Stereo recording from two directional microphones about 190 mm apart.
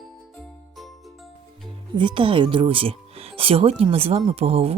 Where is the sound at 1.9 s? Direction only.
25° right (ahead or behind).